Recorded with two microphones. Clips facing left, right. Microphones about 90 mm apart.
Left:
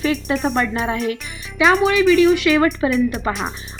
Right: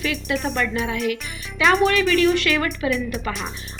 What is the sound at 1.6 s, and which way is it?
Speech, centre (ahead or behind).